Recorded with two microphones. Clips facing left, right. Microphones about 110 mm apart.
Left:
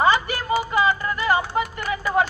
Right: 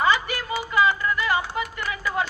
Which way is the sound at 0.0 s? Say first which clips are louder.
Left 3 dB; 35° left (ahead or behind).